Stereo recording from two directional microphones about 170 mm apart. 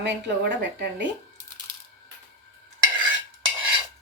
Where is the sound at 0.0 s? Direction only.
90° right.